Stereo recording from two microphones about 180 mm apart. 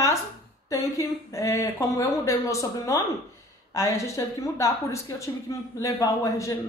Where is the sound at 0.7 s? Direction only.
15° left (ahead or behind).